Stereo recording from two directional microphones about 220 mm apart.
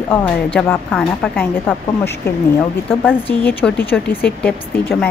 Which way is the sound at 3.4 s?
10° left (ahead or behind).